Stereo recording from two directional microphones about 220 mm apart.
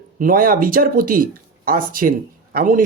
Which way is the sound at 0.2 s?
40° right (ahead or behind).